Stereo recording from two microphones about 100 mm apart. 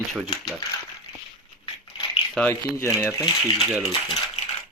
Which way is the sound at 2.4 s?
25° left (ahead or behind).